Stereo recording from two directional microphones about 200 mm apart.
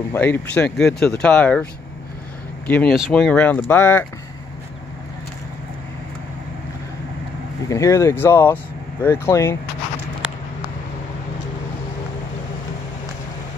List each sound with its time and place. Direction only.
0.1 s speech: 10° left (ahead or behind)
7.6 s speech: 15° left (ahead or behind)